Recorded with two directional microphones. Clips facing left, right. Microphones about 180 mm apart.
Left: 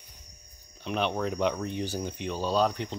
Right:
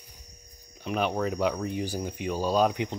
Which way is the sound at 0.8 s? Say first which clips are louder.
Right 1 dB; 5° right (ahead or behind).